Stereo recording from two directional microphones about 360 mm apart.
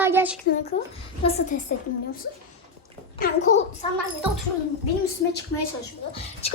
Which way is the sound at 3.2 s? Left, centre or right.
Left.